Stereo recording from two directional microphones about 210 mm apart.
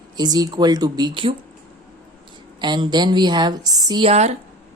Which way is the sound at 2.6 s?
20° right (ahead or behind).